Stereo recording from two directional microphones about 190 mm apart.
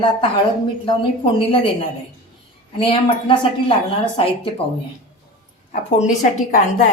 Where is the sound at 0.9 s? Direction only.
25° left (ahead or behind).